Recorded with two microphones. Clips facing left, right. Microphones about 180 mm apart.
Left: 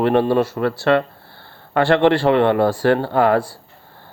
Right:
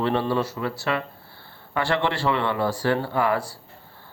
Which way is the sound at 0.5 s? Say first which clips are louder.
Left 10 dB; 65° left (ahead or behind).